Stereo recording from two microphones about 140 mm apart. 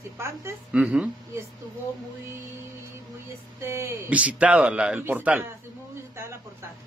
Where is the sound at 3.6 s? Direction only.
20° right (ahead or behind).